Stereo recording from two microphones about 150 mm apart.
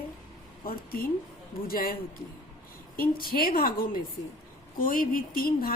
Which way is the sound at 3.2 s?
80° left.